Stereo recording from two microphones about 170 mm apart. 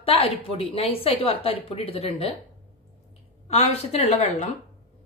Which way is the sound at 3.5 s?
40° left (ahead or behind).